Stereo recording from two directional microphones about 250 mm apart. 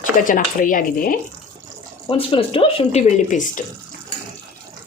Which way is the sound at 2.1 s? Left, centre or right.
Left.